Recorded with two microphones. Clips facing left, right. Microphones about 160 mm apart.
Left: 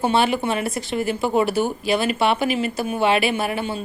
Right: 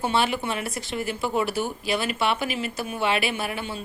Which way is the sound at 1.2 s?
50° left (ahead or behind).